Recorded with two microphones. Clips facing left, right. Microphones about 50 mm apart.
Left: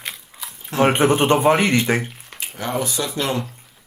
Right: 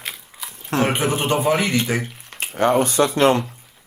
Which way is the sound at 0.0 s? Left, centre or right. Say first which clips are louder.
Even; centre.